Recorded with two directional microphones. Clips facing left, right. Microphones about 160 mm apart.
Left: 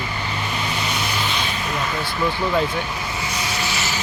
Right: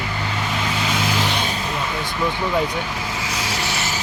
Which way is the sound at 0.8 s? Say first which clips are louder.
Right 3 dB; 90° right.